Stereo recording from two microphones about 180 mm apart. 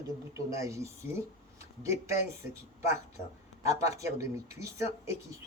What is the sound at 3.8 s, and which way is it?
Speech, 15° right (ahead or behind).